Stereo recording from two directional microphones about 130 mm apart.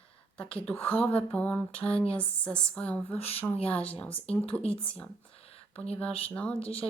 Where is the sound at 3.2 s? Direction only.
50° left (ahead or behind).